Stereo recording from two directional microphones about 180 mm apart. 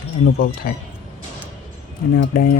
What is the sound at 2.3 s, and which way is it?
Speech, 50° left (ahead or behind).